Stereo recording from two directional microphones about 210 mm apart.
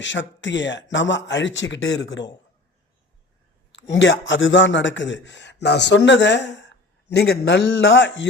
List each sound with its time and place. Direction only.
0.0 s a man's voice: 60° left (ahead or behind)
3.7 s a man's voice: 60° left (ahead or behind)